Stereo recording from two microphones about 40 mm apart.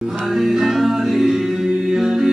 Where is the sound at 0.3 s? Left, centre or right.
Centre.